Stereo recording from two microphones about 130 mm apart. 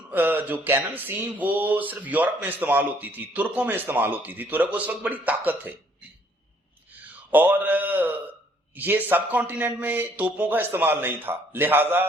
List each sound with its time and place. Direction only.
0.1 s speech: 15° right (ahead or behind)
6.9 s speech: 15° right (ahead or behind)